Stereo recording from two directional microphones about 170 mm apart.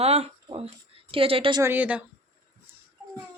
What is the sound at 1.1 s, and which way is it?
Speech, 30° right (ahead or behind).